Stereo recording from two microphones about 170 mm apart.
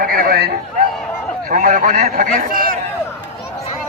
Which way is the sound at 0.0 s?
60° right (ahead or behind).